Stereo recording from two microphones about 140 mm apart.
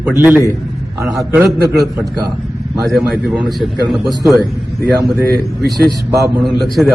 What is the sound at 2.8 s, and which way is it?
A man's voice, centre (ahead or behind).